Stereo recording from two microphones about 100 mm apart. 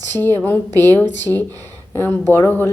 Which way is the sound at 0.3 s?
20° left (ahead or behind).